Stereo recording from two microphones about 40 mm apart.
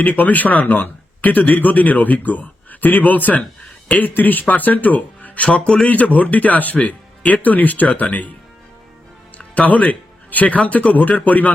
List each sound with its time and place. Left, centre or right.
0.0 s speech: left
4.1 s speech: left
9.6 s speech: left